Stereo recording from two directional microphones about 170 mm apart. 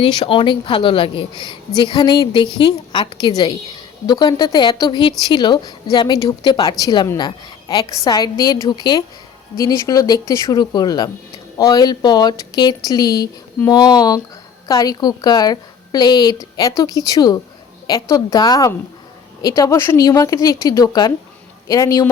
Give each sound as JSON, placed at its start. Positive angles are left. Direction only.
{"t": 0.0, "sound": "a woman's voice", "side_deg": 30}